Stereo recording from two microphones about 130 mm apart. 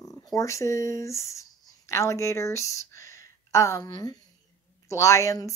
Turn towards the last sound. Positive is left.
turn(degrees=25)  # may be behind; listen again after turning